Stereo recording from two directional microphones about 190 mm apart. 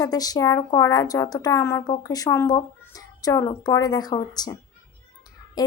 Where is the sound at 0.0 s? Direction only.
20° left (ahead or behind).